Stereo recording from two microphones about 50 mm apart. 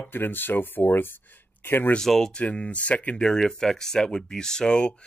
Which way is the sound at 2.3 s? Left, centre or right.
Left.